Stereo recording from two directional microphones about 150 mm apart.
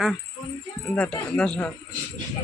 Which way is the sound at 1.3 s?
5° left (ahead or behind).